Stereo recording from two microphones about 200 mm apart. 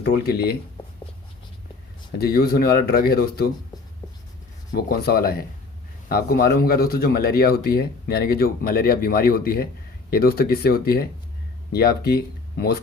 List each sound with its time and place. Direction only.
0.0 s speech: 50° left (ahead or behind)
2.1 s speech: 50° left (ahead or behind)
4.7 s speech: 50° left (ahead or behind)